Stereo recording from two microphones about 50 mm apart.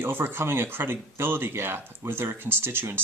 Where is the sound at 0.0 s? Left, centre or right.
Right.